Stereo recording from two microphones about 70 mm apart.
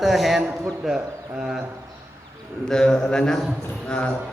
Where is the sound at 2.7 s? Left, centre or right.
Centre.